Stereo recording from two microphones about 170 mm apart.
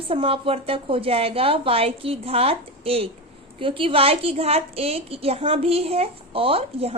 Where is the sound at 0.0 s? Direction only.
35° right (ahead or behind).